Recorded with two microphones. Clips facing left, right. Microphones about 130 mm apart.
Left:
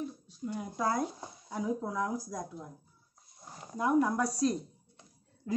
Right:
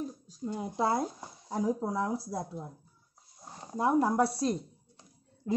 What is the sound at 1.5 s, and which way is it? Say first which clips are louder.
Speech: right 3 dB; 35° right (ahead or behind).